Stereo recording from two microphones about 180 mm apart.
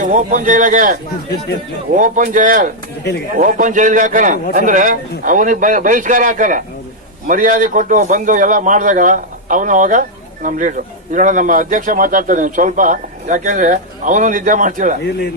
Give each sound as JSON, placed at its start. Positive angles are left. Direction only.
{"t": 0.0, "sound": "a man's voice", "side_deg": -45}
{"t": 2.0, "sound": "a man's voice", "side_deg": -45}